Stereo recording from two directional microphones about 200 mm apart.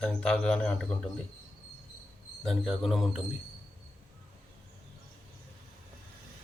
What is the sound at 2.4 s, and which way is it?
Speech, centre (ahead or behind).